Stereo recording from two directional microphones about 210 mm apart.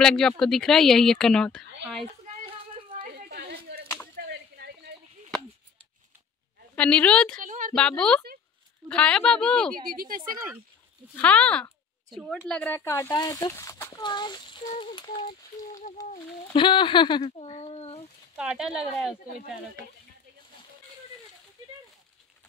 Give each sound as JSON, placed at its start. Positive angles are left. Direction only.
{"t": 0.0, "sound": "a woman's voice", "side_deg": 5}
{"t": 3.3, "sound": "a sound", "side_deg": -50}
{"t": 6.7, "sound": "a woman's voice", "side_deg": 5}
{"t": 7.3, "sound": "a sound", "side_deg": -40}
{"t": 7.7, "sound": "a woman's voice", "side_deg": 5}
{"t": 9.8, "sound": "speech", "side_deg": -45}
{"t": 11.1, "sound": "a woman's voice", "side_deg": 5}
{"t": 18.3, "sound": "a woman's voice", "side_deg": -5}